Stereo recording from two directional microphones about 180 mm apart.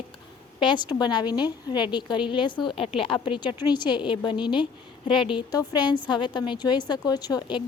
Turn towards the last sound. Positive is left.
turn(degrees=20)  # may be behind; listen again after turning